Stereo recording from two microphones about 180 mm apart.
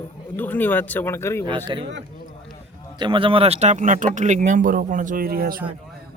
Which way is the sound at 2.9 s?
25° right (ahead or behind).